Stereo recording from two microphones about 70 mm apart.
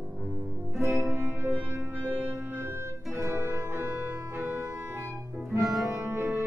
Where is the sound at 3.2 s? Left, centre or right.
Right.